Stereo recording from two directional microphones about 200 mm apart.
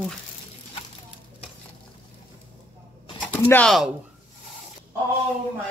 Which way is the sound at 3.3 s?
10° left (ahead or behind).